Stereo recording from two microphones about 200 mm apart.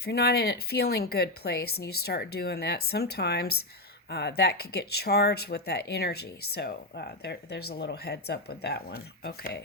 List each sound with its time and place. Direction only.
0.0 s speech: 55° left (ahead or behind)